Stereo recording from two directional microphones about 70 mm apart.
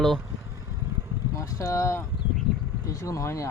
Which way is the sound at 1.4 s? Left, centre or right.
Left.